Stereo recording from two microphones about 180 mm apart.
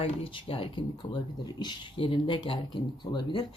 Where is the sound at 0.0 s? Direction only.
30° left (ahead or behind).